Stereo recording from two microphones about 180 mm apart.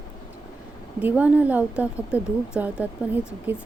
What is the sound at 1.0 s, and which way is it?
Speech, 10° right (ahead or behind).